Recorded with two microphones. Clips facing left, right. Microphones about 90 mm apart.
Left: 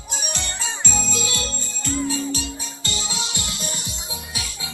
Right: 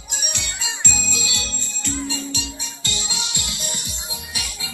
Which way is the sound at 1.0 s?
45° left (ahead or behind).